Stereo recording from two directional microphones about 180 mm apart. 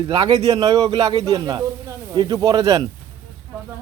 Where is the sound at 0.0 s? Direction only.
25° right (ahead or behind).